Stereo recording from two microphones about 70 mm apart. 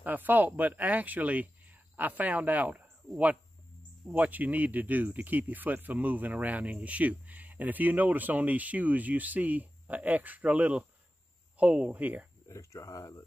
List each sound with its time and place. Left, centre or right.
0.0 s speech: right
12.4 s speech: left